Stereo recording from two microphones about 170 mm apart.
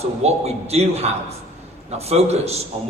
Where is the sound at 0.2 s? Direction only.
40° right (ahead or behind).